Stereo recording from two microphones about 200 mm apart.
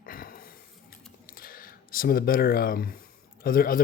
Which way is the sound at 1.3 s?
45° left (ahead or behind).